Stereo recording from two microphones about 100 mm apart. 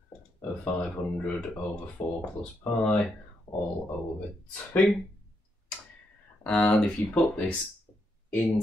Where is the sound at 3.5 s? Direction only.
25° left (ahead or behind).